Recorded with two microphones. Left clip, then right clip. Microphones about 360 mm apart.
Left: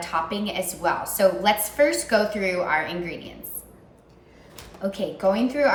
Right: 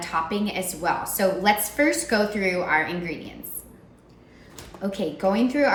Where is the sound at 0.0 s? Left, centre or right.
Centre.